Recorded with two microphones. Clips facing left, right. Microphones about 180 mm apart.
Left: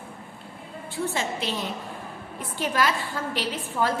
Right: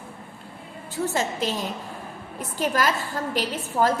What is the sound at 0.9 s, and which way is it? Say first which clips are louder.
A woman's voice: right 3 dB; 40° right (ahead or behind).